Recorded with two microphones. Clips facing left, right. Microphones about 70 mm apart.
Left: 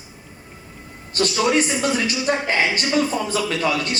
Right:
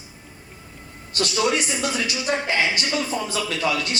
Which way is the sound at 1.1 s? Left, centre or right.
Left.